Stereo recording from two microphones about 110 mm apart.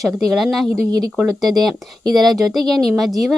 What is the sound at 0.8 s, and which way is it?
Speech, 35° right (ahead or behind).